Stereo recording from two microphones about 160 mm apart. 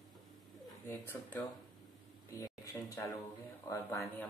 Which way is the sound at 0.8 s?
10° left (ahead or behind).